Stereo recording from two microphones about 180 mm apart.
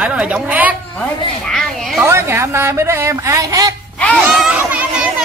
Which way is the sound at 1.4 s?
5° left (ahead or behind).